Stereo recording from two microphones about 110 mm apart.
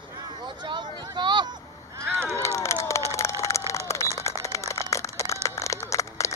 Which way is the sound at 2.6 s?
25° left (ahead or behind).